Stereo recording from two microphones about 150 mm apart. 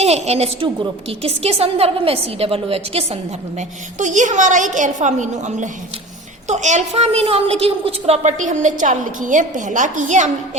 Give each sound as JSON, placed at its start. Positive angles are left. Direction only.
{"t": 0.0, "sound": "a woman's voice", "side_deg": -45}
{"t": 3.9, "sound": "a woman's voice", "side_deg": -55}